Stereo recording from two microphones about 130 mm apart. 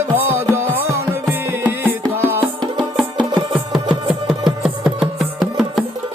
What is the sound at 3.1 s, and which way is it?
Music, 35° right (ahead or behind).